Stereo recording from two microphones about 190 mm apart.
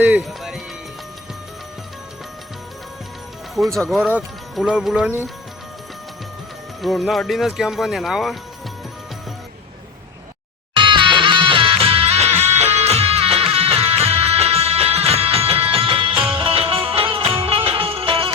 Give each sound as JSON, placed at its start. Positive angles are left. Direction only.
{"t": 0.0, "sound": "speech", "side_deg": -5}
{"t": 3.8, "sound": "speech", "side_deg": 0}
{"t": 6.8, "sound": "speech", "side_deg": 0}
{"t": 10.8, "sound": "music", "side_deg": -25}